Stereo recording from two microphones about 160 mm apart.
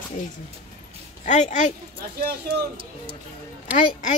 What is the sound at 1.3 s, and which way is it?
Speech, 50° left (ahead or behind).